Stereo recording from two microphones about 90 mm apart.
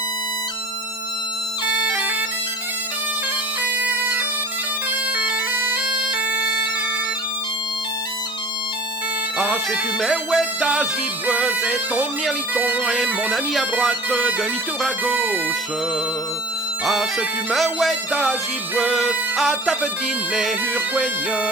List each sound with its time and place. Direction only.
1.6 s bagpipes: 15° right (ahead or behind)
3.6 s bagpipes: 20° right (ahead or behind)
5.1 s bagpipes: 20° right (ahead or behind)
10.0 s music: centre (ahead or behind)
12.5 s bagpipes: 20° right (ahead or behind)
13.3 s music: centre (ahead or behind)
14.1 s music: 10° right (ahead or behind)
14.8 s music: centre (ahead or behind)
15.1 s music: 20° right (ahead or behind)
16.8 s music: centre (ahead or behind)